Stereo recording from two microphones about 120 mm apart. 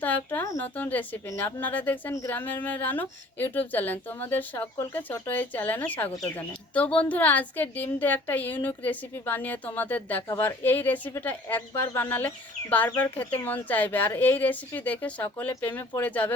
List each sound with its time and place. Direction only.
0.0 s speech: 15° left (ahead or behind)